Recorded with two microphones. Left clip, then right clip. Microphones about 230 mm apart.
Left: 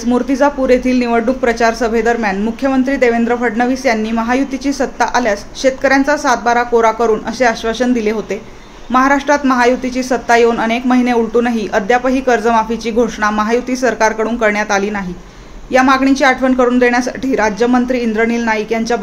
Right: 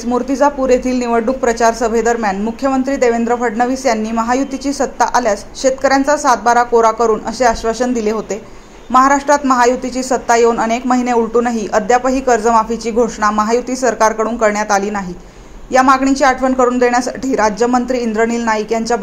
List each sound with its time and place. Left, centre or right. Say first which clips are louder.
0.0 s speech: even; centre
16.0 s speech: left 1 dB; centre